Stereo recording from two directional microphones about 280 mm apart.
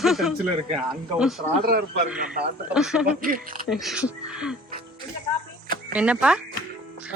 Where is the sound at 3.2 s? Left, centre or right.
Right.